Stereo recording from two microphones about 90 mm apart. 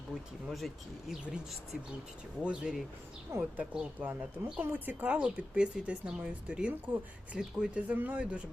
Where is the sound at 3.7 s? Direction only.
15° right (ahead or behind).